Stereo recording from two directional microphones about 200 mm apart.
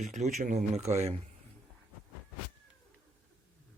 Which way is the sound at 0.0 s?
35° right (ahead or behind).